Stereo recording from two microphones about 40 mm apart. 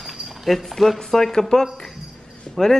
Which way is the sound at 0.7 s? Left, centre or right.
Centre.